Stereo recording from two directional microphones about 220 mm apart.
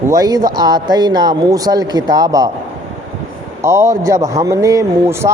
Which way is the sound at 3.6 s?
15° right (ahead or behind).